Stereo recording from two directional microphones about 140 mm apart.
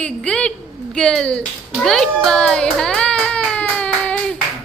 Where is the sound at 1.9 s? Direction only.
Centre (ahead or behind).